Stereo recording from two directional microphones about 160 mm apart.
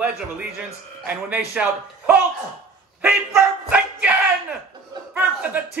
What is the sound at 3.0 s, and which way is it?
Dog, 10° right (ahead or behind).